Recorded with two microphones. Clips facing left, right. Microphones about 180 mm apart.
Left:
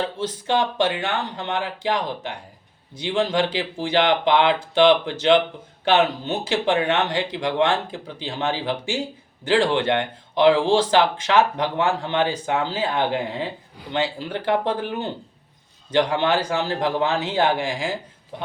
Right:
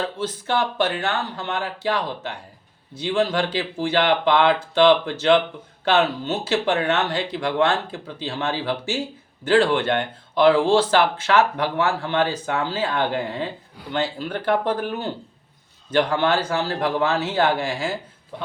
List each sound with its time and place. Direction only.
0.0 s speech: 15° left (ahead or behind)